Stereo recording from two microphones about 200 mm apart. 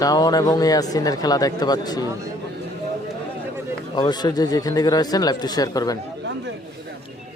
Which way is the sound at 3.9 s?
20° left (ahead or behind).